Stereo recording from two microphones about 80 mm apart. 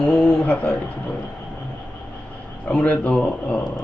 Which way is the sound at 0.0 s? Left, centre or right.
Centre.